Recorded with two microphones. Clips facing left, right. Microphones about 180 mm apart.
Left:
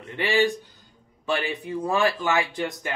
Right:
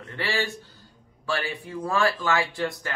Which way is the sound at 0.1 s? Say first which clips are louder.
Left 6 dB; 15° left (ahead or behind).